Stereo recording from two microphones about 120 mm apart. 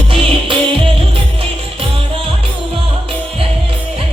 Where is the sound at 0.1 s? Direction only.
50° right (ahead or behind).